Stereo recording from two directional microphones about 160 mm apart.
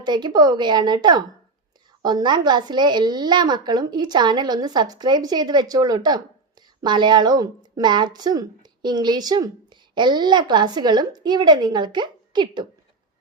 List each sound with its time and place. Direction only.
0.0 s a woman's voice: 25° right (ahead or behind)